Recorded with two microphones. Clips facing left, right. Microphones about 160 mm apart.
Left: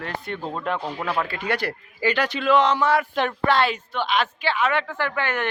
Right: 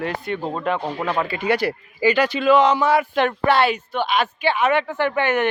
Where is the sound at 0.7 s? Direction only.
Centre (ahead or behind).